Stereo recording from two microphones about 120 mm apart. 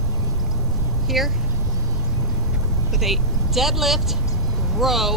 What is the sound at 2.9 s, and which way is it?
Speech, centre (ahead or behind).